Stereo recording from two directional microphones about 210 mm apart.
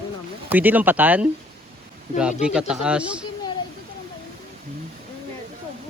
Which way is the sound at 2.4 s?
5° right (ahead or behind).